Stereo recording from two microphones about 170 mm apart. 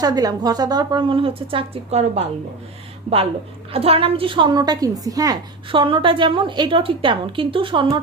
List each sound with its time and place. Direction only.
0.0 s a woman's voice: 20° right (ahead or behind); by 2.2 s 40° right (ahead or behind)
3.7 s a woman's voice: 35° right (ahead or behind)